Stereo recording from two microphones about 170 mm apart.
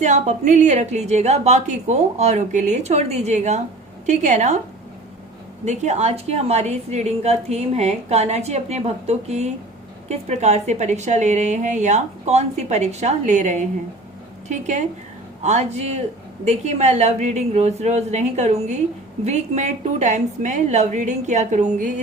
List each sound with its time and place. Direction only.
0.0 s a woman's voice: 45° right (ahead or behind)
5.6 s a woman's voice: 40° right (ahead or behind)